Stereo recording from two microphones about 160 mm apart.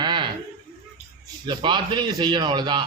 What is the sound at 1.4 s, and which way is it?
A man's voice, 30° right (ahead or behind).